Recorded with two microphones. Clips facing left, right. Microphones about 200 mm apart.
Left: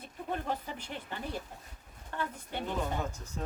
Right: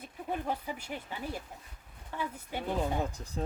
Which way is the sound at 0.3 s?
10° right (ahead or behind).